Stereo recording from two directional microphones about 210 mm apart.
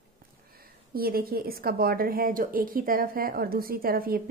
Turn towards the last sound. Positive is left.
turn(degrees=-45)  # may be behind; listen again after turning